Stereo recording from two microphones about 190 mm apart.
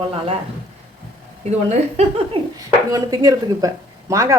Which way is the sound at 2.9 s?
20° right (ahead or behind).